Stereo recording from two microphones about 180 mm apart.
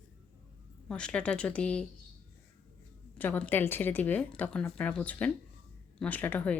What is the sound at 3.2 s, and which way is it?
Speech, 10° left (ahead or behind).